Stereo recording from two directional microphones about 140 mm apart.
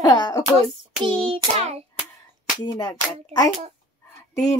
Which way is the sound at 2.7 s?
30° left (ahead or behind).